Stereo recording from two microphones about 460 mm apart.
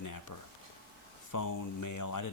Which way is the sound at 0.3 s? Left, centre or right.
Left.